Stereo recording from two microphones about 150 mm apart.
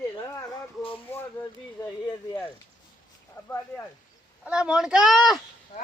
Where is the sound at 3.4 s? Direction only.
25° left (ahead or behind).